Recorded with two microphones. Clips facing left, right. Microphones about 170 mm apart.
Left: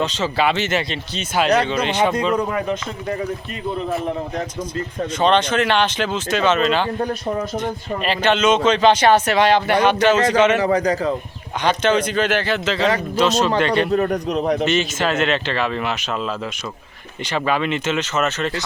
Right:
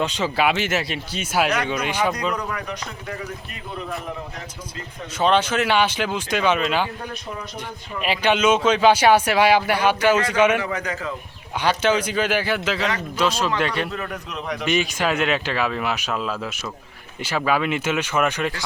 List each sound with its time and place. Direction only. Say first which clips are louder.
0.0 s speech: left 2 dB; 10° right (ahead or behind)
2.3 s speech: left 8 dB; 25° left (ahead or behind)
5.2 s speech: left 2 dB; 10° right (ahead or behind)
7.0 s speech: left 10 dB; 45° left (ahead or behind)
7.6 s speech: left 6 dB; 10° right (ahead or behind)
10.6 s a man's voice: left 9 dB; 35° left (ahead or behind)
11.6 s a man's voice: left 2 dB; 10° right (ahead or behind)
13.9 s a man's voice: left 12 dB; 40° left (ahead or behind)
14.6 s speech: left 3 dB; 10° right (ahead or behind)